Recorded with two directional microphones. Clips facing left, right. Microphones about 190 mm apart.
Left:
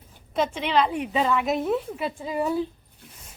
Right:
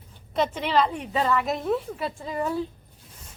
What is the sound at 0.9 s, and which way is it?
A woman's voice, 10° left (ahead or behind).